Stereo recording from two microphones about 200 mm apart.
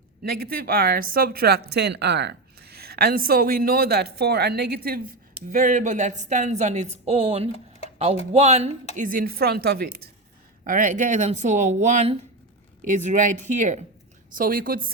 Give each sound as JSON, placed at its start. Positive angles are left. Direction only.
{"t": 0.2, "sound": "speech", "side_deg": -50}
{"t": 5.5, "sound": "a woman's voice", "side_deg": -40}
{"t": 9.0, "sound": "a woman's voice", "side_deg": -45}